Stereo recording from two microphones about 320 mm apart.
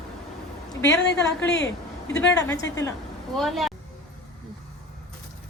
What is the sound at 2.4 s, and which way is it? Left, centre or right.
Speech, centre.